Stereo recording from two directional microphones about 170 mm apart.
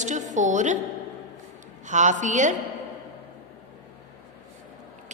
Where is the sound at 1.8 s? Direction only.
45° right (ahead or behind).